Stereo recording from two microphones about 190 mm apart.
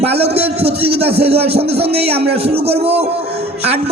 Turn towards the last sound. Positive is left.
turn(degrees=-30)  # may be behind; listen again after turning